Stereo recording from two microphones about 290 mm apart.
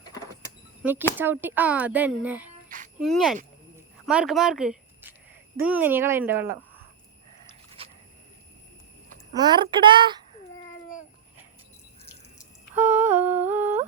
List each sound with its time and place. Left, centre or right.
0.4 s a sound: centre
1.2 s speech: centre
2.6 s jingle bell: right
3.0 s speech: centre
3.8 s a sound: centre
5.5 s speech: centre
7.8 s a sound: centre
9.3 s speech: centre
12.7 s humming: centre